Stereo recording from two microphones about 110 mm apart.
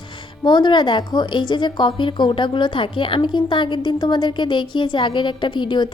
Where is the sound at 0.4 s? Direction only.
45° left (ahead or behind).